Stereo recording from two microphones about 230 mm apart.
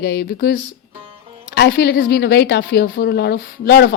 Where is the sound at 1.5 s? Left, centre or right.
Left.